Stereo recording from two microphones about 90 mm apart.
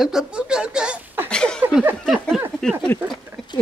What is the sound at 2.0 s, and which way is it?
Speech, centre (ahead or behind).